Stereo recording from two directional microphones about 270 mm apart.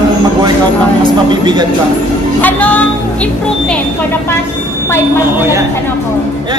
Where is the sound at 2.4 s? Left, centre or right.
Centre.